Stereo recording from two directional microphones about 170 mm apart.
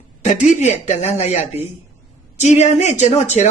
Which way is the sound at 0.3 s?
40° left (ahead or behind).